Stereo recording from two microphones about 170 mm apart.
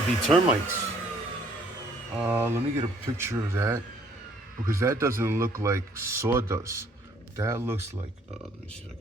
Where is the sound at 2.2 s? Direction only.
10° right (ahead or behind).